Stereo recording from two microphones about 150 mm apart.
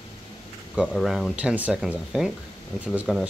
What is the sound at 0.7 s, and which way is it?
Speech, 5° right (ahead or behind).